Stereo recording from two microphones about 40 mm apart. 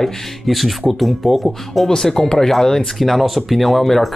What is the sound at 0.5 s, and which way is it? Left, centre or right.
Speech, centre.